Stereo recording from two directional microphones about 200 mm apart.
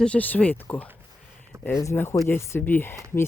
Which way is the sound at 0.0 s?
5° left (ahead or behind).